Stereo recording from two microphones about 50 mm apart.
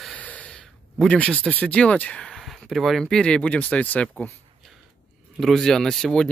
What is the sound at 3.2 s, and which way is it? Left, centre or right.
Speech, left.